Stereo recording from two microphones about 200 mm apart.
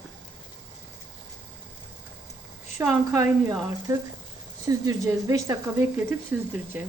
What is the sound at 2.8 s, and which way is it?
Speech, 15° right (ahead or behind).